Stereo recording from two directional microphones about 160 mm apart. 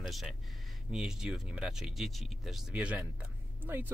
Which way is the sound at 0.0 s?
Centre (ahead or behind).